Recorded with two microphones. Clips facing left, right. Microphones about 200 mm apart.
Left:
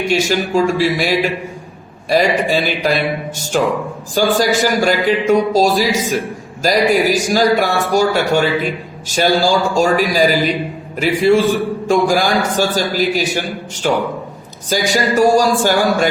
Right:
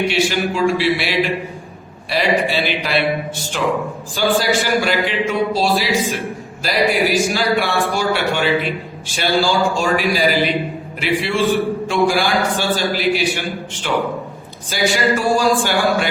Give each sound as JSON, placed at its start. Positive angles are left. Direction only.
{"t": 0.1, "sound": "a man's voice", "side_deg": 45}